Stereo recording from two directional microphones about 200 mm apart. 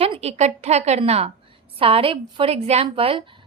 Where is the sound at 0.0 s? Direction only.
30° right (ahead or behind).